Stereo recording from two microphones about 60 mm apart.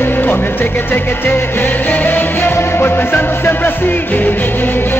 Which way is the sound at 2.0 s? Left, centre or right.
Left.